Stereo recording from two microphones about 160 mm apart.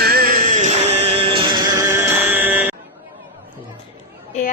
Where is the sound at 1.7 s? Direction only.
15° right (ahead or behind).